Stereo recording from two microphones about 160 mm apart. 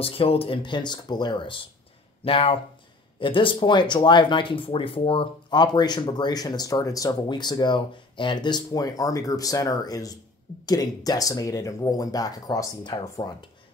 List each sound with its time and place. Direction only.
0.0 s speech: 35° left (ahead or behind)